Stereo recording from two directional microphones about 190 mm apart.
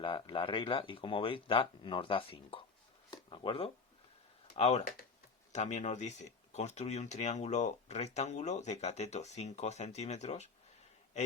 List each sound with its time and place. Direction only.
0.0 s speech: 25° left (ahead or behind)
3.1 s a sound: 25° left (ahead or behind)
4.5 s speech: 35° left (ahead or behind)